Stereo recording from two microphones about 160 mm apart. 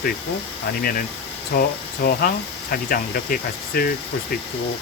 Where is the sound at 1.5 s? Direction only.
75° left (ahead or behind).